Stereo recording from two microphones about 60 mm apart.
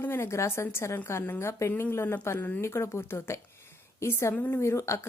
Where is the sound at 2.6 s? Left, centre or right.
Left.